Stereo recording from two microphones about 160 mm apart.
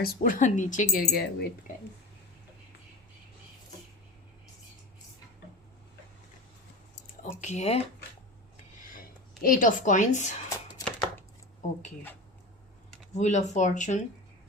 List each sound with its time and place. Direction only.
0.0 s speech: 65° left (ahead or behind)
7.2 s speech: 45° left (ahead or behind)
8.8 s a sound: 60° left (ahead or behind)
13.1 s speech: 50° left (ahead or behind)